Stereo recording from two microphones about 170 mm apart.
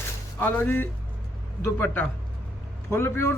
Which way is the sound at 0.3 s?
10° left (ahead or behind).